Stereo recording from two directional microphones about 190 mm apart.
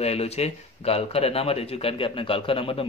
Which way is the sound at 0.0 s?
35° left (ahead or behind).